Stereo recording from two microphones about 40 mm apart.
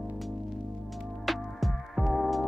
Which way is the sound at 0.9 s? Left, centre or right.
Centre.